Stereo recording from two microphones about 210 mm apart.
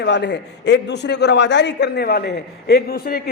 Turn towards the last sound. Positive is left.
turn(degrees=45)  # may be behind; listen again after turning